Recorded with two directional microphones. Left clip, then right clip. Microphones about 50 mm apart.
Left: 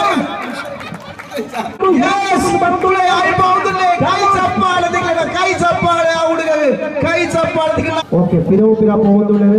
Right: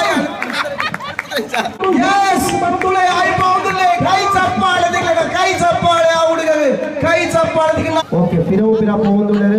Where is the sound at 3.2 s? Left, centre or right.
Left.